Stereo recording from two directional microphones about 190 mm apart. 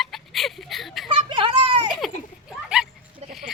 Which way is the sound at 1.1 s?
25° right (ahead or behind).